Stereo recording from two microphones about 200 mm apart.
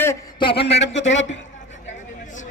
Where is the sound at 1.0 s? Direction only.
65° left (ahead or behind).